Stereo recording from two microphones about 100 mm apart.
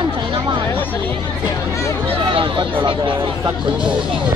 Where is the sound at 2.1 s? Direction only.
60° right (ahead or behind).